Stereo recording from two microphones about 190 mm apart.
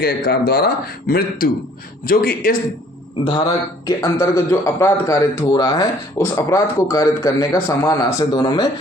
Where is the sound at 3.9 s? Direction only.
20° left (ahead or behind).